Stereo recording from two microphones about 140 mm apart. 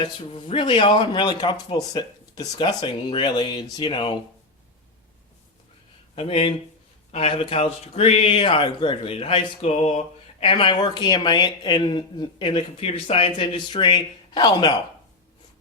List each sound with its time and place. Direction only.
0.0 s speech: 35° left (ahead or behind)
6.1 s speech: 45° left (ahead or behind)